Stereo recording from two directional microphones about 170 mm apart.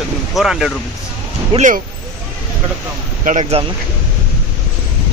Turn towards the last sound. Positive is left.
turn(degrees=-35)  # may be behind; listen again after turning